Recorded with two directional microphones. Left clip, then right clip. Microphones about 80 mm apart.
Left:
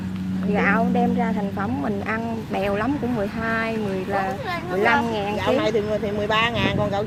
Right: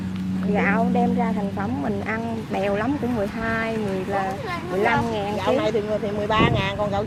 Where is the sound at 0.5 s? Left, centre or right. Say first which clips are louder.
Left 1 dB; centre.